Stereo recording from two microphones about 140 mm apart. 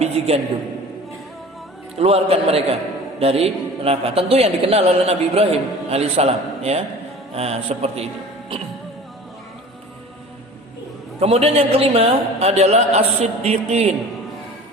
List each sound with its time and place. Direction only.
2.0 s a man's voice: 45° right (ahead or behind)
11.2 s a man's voice: 45° right (ahead or behind)